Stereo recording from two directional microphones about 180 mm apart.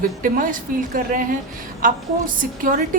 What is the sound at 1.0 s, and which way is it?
A woman's voice, 50° right (ahead or behind).